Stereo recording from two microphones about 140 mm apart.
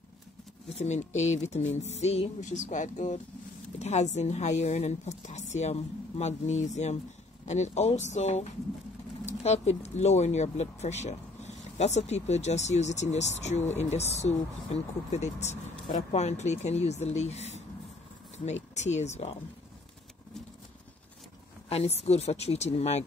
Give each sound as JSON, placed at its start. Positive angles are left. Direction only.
{"t": 0.7, "sound": "a woman's voice", "side_deg": 50}
{"t": 21.6, "sound": "speech", "side_deg": 45}